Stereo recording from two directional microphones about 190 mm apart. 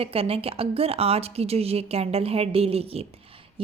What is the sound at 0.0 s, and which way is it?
A woman's voice, 30° right (ahead or behind).